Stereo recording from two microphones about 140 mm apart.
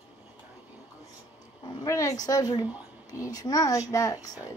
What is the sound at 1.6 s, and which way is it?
A woman's voice, 25° left (ahead or behind).